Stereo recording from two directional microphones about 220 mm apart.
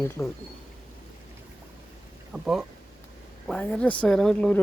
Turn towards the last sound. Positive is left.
turn(degrees=5)  # may be behind; listen again after turning